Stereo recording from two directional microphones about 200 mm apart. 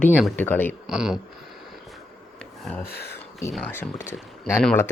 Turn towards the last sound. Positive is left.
turn(degrees=10)  # may be behind; listen again after turning